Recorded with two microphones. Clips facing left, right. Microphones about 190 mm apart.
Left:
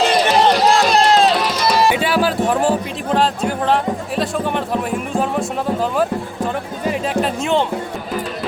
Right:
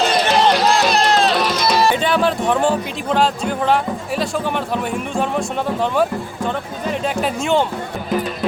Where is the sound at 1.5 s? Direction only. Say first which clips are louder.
Left 1 dB; 10° left (ahead or behind).